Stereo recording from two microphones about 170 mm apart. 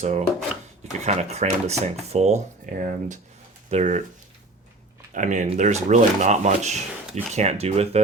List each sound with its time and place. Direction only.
0.0 s speech: 40° right (ahead or behind)
2.6 s speech: 50° right (ahead or behind)
5.1 s speech: 45° right (ahead or behind)